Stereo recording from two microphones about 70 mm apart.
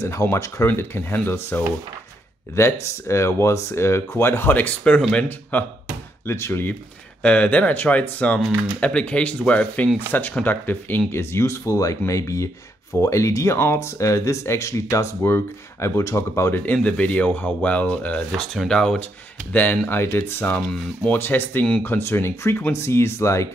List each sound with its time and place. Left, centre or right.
0.0 s speech: left
0.7 s speech: left
6.2 s speech: left
7.2 s speech: centre; by 16.6 s left
16.6 s speech: centre
18.3 s speech: centre
19.5 s speech: left
20.5 s speech: centre; by 23.5 s left